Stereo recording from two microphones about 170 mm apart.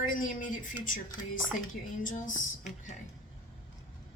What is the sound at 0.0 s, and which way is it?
Speech, 50° left (ahead or behind).